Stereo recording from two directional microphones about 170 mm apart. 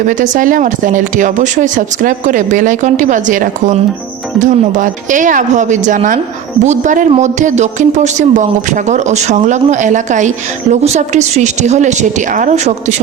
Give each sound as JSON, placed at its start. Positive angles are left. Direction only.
{"t": 0.0, "sound": "speech", "side_deg": -50}